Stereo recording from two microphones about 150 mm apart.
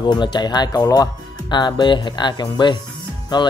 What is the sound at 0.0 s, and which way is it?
Speech, 30° left (ahead or behind).